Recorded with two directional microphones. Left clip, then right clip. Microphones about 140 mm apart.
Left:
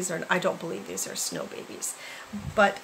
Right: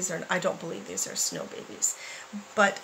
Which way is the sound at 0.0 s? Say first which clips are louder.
Left 2 dB; 10° left (ahead or behind).